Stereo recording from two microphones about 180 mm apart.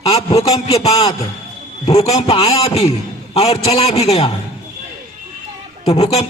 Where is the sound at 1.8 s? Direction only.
35° left (ahead or behind).